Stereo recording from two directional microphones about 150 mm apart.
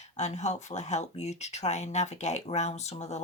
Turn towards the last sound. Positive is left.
turn(degrees=45)  # may be behind; listen again after turning